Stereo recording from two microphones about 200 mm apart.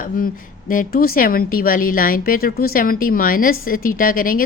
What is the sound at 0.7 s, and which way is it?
A woman's voice, 45° left (ahead or behind).